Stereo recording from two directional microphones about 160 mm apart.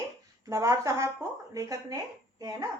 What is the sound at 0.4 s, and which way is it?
A woman's voice, 20° right (ahead or behind).